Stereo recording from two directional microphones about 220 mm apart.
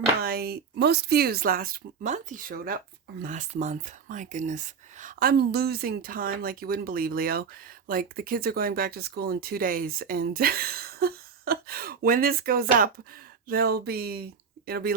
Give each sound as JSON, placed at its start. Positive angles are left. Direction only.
{"t": 0.2, "sound": "speech", "side_deg": -45}